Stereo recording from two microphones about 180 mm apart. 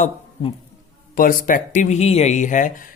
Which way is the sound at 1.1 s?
50° left (ahead or behind).